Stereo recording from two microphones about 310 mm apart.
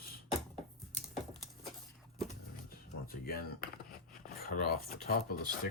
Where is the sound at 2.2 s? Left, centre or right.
Left.